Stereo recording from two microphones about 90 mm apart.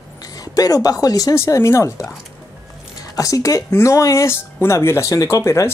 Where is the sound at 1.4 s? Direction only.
30° left (ahead or behind).